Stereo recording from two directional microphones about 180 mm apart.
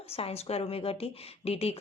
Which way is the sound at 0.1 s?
35° left (ahead or behind).